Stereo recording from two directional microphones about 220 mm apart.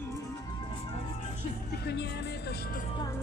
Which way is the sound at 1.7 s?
50° left (ahead or behind).